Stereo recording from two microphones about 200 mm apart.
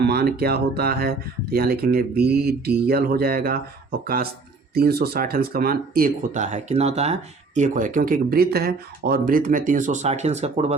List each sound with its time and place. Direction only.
0.0 s speech: 50° right (ahead or behind); by 10.8 s 30° right (ahead or behind)